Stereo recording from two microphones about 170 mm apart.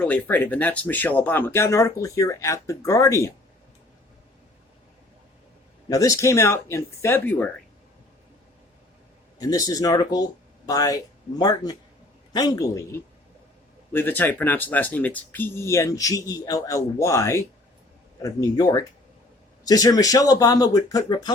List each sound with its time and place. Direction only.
0.0 s speech: 10° left (ahead or behind)
5.9 s speech: 20° left (ahead or behind)
9.4 s speech: 20° left (ahead or behind)